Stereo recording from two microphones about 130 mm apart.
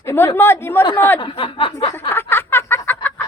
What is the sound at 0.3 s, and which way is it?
Speech, 20° left (ahead or behind).